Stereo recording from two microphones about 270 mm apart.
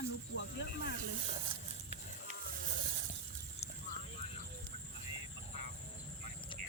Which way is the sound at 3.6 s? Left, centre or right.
Left.